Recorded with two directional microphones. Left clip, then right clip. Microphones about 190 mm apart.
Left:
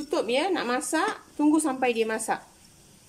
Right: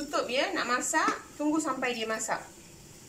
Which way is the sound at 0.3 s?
75° left (ahead or behind).